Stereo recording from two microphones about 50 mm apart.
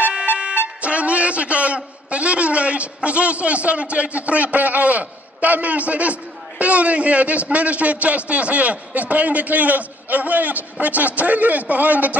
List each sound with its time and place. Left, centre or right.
0.8 s a man's voice: right